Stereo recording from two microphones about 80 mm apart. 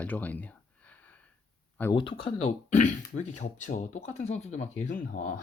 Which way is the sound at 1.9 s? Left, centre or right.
Left.